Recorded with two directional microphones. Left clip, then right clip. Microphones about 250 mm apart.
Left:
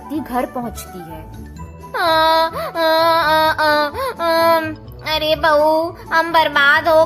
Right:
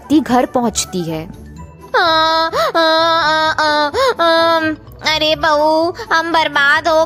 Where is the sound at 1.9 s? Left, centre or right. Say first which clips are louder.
Right 2 dB; right.